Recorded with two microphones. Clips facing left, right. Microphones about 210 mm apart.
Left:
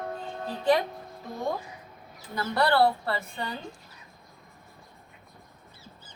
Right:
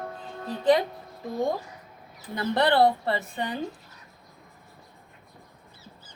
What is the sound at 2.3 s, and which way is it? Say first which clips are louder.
A woman's voice: right 2 dB; 20° right (ahead or behind).